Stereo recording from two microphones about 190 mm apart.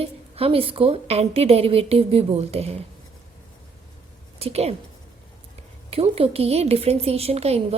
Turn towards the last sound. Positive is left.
turn(degrees=-35)  # may be behind; listen again after turning